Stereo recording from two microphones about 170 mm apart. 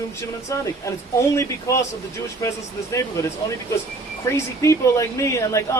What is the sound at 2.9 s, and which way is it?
A man's voice, 20° left (ahead or behind).